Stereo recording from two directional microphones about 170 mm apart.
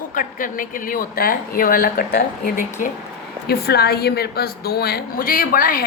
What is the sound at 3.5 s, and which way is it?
A woman's voice, 70° left (ahead or behind).